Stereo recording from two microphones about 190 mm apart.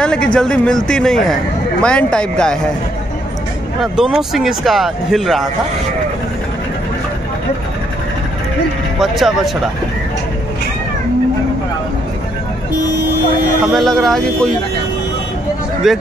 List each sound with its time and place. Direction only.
0.0 s a man's voice: 5° left (ahead or behind)
3.8 s a man's voice: 5° right (ahead or behind)
9.0 s a man's voice: centre (ahead or behind)
13.7 s a man's voice: centre (ahead or behind)
15.8 s a man's voice: centre (ahead or behind)